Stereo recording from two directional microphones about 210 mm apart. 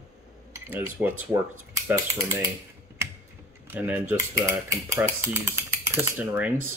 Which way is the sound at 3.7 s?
10° right (ahead or behind).